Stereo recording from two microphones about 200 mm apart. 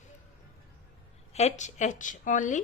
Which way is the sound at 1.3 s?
30° left (ahead or behind).